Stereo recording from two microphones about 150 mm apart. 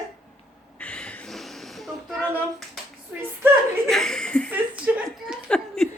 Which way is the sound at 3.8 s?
5° left (ahead or behind).